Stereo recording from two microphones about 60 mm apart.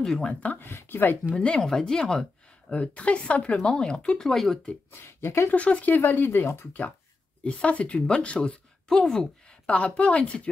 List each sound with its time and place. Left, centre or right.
0.0 s speech: centre
0.3 s a woman's voice: left
0.6 s speech: left
1.3 s speech: centre
2.7 s a woman's voice: left; by 4.6 s centre
4.9 s speech: left
5.5 s speech: left
7.4 s speech: centre
9.7 s a woman's voice: left